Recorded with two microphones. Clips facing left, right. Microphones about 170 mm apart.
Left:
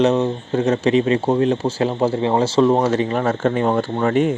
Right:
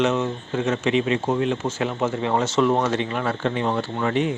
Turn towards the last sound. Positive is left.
turn(degrees=45)  # may be behind; listen again after turning